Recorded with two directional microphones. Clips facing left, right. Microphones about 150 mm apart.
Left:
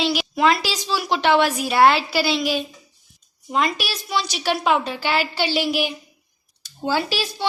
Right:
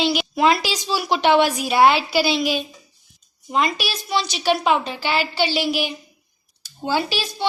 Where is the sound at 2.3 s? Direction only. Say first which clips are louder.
Right 1 dB; centre (ahead or behind).